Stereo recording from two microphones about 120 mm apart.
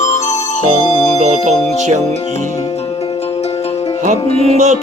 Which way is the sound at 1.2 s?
70° right (ahead or behind).